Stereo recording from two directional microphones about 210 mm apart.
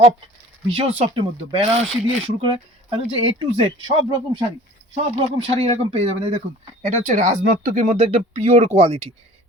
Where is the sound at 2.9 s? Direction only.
25° right (ahead or behind).